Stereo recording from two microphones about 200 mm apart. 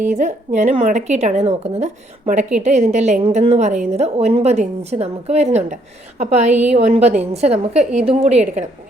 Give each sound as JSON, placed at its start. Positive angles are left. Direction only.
{"t": 0.1, "sound": "a woman's voice", "side_deg": -35}